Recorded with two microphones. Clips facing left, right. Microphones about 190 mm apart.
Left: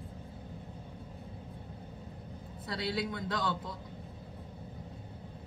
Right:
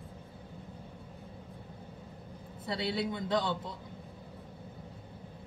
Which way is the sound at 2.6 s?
25° right (ahead or behind).